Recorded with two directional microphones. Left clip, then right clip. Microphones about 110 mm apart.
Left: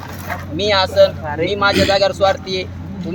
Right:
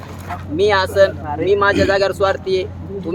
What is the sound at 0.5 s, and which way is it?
Speech, 35° right (ahead or behind).